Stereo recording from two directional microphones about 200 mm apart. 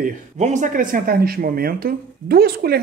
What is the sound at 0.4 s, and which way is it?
Speech, 35° right (ahead or behind).